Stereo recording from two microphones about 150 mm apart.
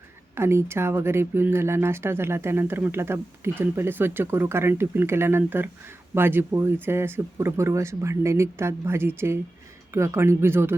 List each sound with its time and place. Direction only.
0.3 s speech: 15° right (ahead or behind)